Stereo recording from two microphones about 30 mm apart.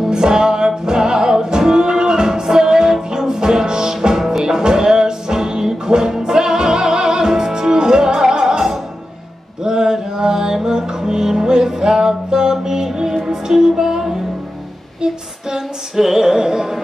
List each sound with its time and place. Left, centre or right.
0.1 s music: right
15.5 s music: centre